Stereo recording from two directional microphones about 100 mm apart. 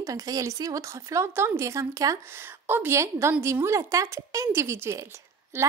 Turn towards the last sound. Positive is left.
turn(degrees=-25)  # may be behind; listen again after turning